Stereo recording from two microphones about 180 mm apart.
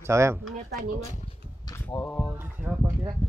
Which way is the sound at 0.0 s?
15° right (ahead or behind).